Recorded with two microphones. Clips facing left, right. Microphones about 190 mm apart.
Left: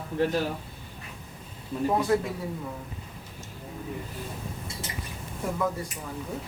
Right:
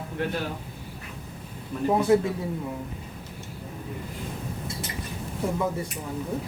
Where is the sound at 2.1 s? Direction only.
15° right (ahead or behind).